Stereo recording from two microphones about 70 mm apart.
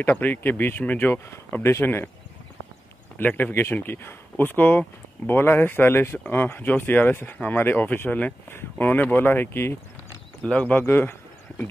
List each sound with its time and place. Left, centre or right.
0.0 s speech: left
3.2 s speech: left